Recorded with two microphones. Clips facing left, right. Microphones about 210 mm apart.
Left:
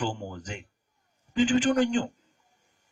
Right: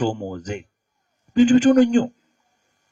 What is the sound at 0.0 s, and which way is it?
A man's voice, 45° right (ahead or behind).